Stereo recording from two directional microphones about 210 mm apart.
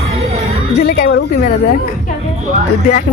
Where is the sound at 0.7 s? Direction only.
50° left (ahead or behind).